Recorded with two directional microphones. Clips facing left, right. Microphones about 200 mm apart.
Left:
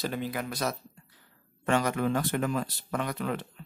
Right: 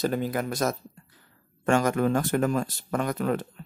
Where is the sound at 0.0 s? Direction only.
45° right (ahead or behind).